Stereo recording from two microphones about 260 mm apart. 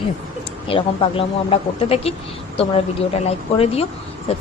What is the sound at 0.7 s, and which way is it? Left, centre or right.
A woman's voice, left.